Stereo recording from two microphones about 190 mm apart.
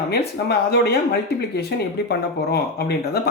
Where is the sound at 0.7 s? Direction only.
60° left (ahead or behind).